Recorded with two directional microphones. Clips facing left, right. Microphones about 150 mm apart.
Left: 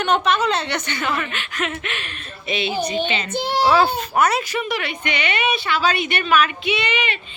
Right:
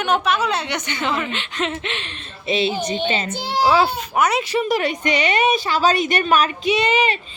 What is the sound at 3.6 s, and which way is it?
Speech, 15° right (ahead or behind).